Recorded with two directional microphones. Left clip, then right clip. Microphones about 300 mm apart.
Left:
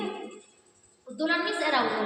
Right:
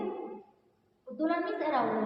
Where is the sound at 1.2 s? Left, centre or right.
Left.